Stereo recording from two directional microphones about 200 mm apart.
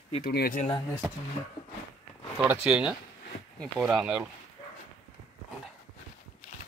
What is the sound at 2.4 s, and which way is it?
Speech, 5° right (ahead or behind).